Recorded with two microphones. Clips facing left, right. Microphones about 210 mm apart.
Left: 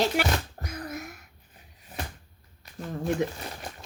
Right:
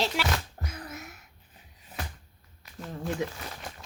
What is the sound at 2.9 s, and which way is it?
Speech, 55° left (ahead or behind).